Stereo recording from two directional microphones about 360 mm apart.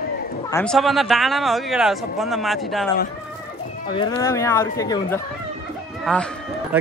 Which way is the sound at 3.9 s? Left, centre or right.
Centre.